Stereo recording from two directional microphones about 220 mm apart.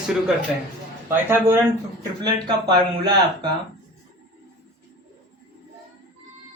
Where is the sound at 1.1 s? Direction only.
10° right (ahead or behind).